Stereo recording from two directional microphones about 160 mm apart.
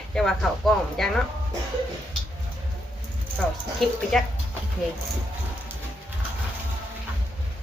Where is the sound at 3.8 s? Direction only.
Centre (ahead or behind).